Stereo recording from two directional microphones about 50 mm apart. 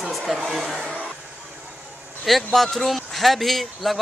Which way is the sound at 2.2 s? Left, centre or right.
Centre.